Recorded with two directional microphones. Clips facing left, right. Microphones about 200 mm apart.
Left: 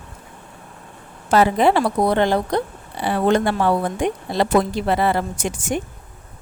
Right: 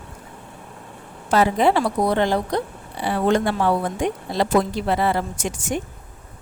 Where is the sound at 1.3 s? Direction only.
65° left (ahead or behind).